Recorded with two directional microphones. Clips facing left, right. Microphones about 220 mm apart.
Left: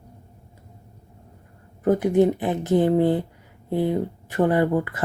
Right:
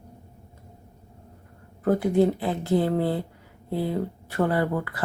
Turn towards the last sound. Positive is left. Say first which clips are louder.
# left 5 dB
turn(degrees=20)  # may be behind; listen again after turning